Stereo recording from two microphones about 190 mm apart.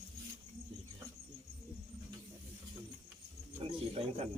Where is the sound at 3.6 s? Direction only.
30° right (ahead or behind).